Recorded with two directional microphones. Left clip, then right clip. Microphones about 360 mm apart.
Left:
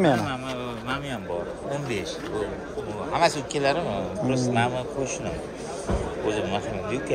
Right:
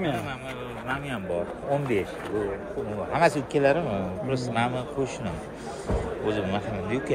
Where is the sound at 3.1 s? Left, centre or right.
Centre.